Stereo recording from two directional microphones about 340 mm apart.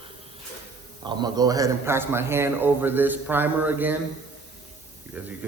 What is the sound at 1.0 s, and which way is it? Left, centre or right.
A man's voice, centre.